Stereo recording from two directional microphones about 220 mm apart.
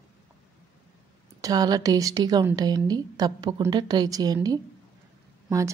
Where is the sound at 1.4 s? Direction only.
15° right (ahead or behind).